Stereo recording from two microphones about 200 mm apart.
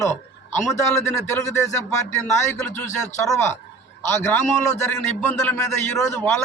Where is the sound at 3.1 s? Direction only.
15° left (ahead or behind).